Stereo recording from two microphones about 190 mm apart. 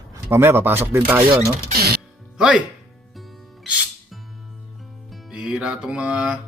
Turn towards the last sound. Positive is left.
turn(degrees=-5)  # may be behind; listen again after turning